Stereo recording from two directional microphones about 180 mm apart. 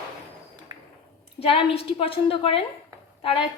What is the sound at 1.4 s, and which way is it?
A woman's voice, 35° left (ahead or behind).